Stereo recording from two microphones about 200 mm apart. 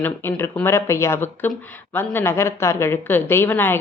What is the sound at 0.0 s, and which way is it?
Speech, 10° left (ahead or behind).